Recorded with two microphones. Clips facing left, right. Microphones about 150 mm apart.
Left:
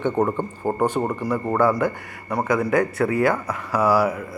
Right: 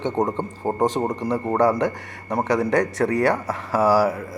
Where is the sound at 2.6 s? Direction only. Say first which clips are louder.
Even; 40° right (ahead or behind).